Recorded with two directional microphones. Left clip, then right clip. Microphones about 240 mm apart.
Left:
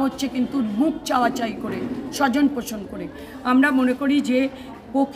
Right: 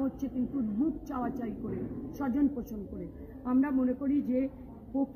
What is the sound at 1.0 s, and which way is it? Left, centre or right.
A man's voice, left.